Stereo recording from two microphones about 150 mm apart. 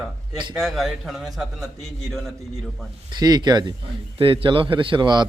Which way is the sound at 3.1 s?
25° right (ahead or behind).